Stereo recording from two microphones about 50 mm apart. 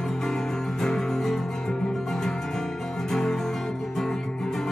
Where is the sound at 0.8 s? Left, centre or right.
Centre.